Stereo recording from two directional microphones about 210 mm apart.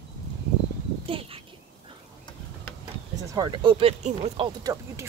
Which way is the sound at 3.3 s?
20° right (ahead or behind).